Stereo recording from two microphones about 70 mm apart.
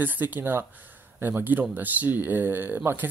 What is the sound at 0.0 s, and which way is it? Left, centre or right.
Speech, right.